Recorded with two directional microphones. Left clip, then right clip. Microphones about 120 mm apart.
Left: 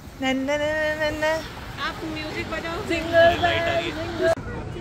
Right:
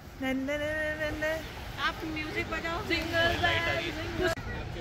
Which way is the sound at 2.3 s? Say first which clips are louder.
Left 3 dB; 20° right (ahead or behind).